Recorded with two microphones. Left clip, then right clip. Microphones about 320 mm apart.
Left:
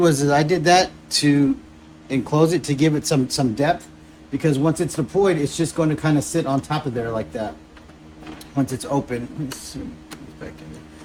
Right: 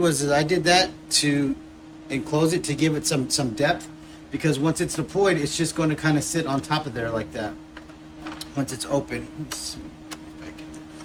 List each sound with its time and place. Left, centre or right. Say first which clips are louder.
0.0 s speech: left 4 dB; centre
8.8 s speech: left 2 dB; centre